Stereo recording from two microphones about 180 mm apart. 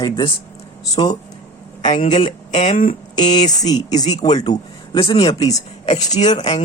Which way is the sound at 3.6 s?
20° left (ahead or behind).